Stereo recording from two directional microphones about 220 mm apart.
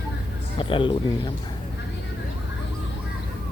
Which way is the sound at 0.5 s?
25° left (ahead or behind).